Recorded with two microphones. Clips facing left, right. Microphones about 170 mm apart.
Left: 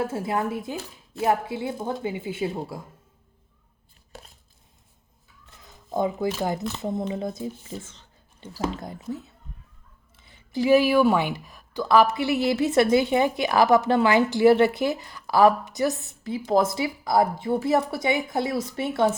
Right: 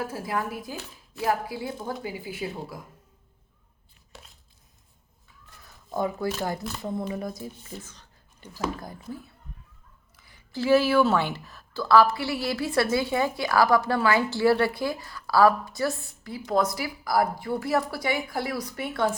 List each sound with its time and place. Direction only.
0.0 s speech: 25° left (ahead or behind)
4.1 s chopping: 50° left (ahead or behind)
5.6 s speech: 20° left (ahead or behind)